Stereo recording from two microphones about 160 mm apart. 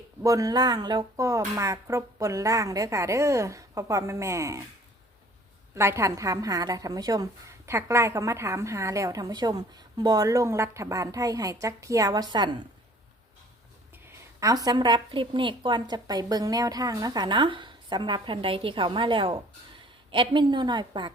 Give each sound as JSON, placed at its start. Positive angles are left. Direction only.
{"t": 0.2, "sound": "a woman's voice", "side_deg": -20}
{"t": 5.7, "sound": "a woman's voice", "side_deg": -15}
{"t": 14.3, "sound": "a woman's voice", "side_deg": -20}